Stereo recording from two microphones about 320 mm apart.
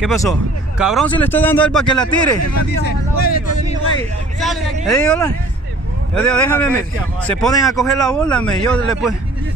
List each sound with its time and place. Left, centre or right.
0.2 s speech: centre
2.7 s speech: left
4.4 s speech: centre